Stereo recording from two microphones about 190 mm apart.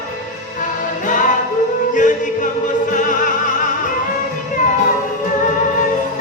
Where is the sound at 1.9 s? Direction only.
40° left (ahead or behind).